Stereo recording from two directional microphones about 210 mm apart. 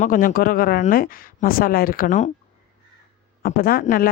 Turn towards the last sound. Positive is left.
turn(degrees=40)  # may be behind; listen again after turning